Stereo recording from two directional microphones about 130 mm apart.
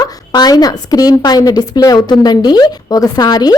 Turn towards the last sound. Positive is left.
turn(degrees=30)  # may be behind; listen again after turning